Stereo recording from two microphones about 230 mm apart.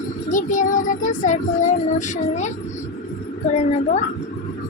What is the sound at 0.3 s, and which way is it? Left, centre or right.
Child singing, left.